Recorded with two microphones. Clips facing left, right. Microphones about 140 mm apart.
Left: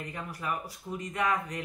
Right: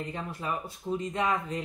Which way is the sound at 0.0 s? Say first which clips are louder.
Right 2 dB; 25° right (ahead or behind).